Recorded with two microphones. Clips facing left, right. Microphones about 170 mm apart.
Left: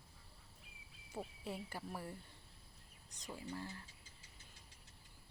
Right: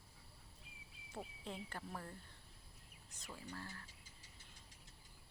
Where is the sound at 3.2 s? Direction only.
15° left (ahead or behind).